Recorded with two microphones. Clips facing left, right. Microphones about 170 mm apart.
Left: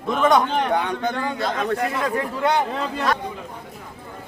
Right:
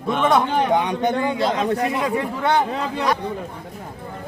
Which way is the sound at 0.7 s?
15° right (ahead or behind).